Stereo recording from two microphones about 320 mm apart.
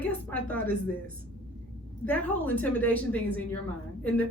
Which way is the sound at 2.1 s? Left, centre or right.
Centre.